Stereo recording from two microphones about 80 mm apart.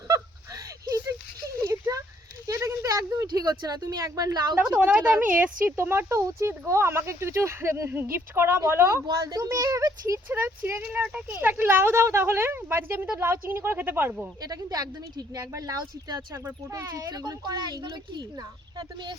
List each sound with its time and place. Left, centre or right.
0.1 s a sound: right
4.5 s speech: centre
9.2 s a woman's voice: right
10.2 s speech: right
14.4 s a woman's voice: right